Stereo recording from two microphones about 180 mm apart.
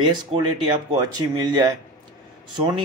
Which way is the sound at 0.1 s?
25° right (ahead or behind).